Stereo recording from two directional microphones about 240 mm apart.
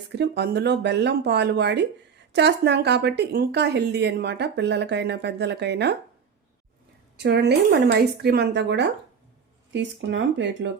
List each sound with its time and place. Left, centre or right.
0.2 s speech: right
7.2 s speech: right